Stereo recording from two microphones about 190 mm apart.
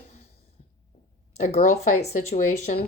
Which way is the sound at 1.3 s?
40° left (ahead or behind).